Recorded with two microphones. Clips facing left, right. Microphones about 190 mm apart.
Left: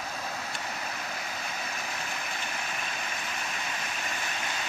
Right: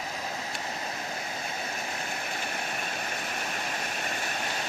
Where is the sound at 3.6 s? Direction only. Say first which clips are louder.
Right 2 dB; 45° right (ahead or behind).